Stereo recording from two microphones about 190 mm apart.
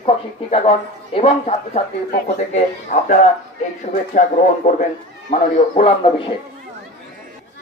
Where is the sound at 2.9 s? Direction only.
45° left (ahead or behind).